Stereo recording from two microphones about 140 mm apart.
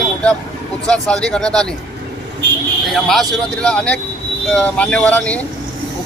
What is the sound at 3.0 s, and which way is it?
A man's voice, centre (ahead or behind).